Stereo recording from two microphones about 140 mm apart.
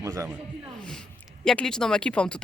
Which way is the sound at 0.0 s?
25° right (ahead or behind).